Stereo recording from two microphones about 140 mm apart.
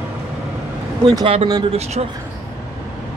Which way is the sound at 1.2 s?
45° right (ahead or behind).